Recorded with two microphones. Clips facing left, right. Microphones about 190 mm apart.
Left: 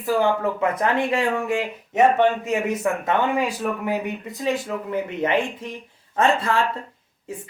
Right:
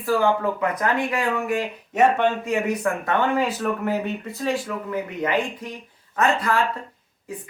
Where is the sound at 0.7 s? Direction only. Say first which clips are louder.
Left 2 dB; 25° left (ahead or behind).